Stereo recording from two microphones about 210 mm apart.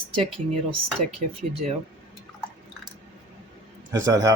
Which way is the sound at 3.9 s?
15° right (ahead or behind).